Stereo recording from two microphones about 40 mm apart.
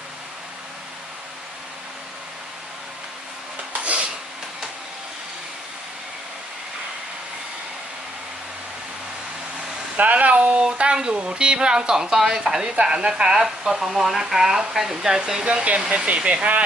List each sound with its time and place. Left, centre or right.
3.7 s a sound: right
10.0 s speech: right
10.6 s speech: right
12.1 s speech: centre
15.4 s speech: right